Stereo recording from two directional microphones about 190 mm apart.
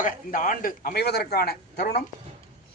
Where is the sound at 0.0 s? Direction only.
45° left (ahead or behind).